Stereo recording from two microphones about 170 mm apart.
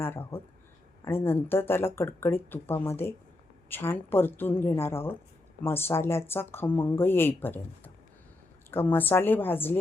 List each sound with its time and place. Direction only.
0.0 s speech: 15° left (ahead or behind)
8.7 s speech: 10° left (ahead or behind)